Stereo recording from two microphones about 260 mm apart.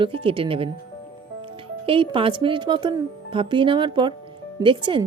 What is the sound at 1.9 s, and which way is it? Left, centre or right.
A woman's voice, centre.